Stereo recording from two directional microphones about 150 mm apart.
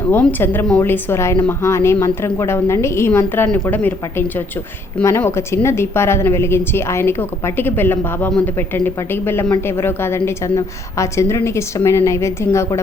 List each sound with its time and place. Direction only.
0.1 s speech: 10° left (ahead or behind)